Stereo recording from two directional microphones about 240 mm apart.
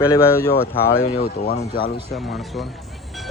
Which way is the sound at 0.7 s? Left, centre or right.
Left.